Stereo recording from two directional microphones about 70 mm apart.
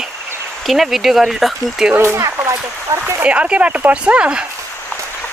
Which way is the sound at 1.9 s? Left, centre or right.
Right.